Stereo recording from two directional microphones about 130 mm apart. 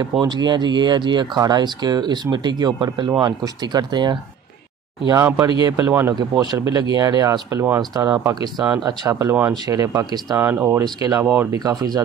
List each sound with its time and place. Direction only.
0.2 s speech: 35° right (ahead or behind)
5.2 s speech: 30° right (ahead or behind)
5.9 s speech: 20° right (ahead or behind)
6.1 s speech: 30° right (ahead or behind)
7.9 s speech: 30° right (ahead or behind)